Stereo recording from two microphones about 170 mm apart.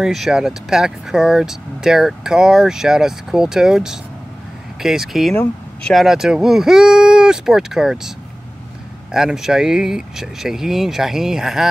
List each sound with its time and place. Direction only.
0.0 s speech: 5° right (ahead or behind)
5.3 s speech: 10° left (ahead or behind)
5.9 s speech: centre (ahead or behind)
9.1 s speech: 5° right (ahead or behind)